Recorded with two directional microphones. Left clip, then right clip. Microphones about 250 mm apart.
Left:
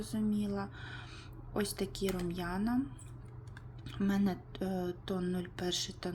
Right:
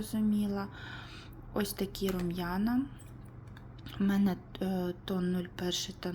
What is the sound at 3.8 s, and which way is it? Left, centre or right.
Speech, centre.